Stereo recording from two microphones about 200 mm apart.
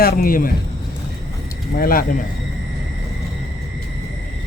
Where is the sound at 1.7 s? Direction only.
45° left (ahead or behind).